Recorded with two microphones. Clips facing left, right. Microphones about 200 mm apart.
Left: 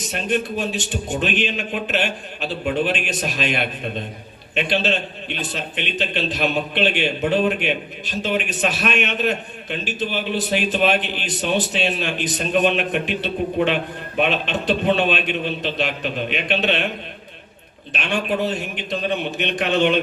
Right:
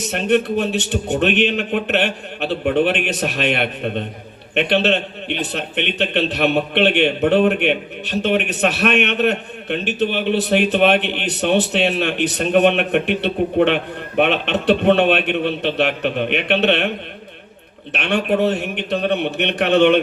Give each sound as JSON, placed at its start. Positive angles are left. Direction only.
{"t": 0.0, "sound": "a man's voice", "side_deg": -65}
{"t": 17.9, "sound": "a man's voice", "side_deg": -65}